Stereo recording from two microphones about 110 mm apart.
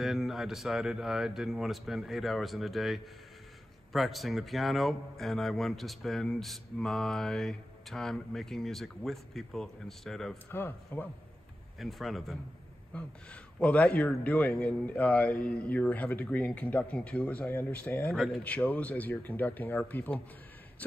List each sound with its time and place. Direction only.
0.0 s a man's voice: centre (ahead or behind)
10.5 s speech: 20° left (ahead or behind)
11.8 s a man's voice: centre (ahead or behind)
12.9 s a man's voice: 10° left (ahead or behind)
18.4 s a man's voice: 15° left (ahead or behind)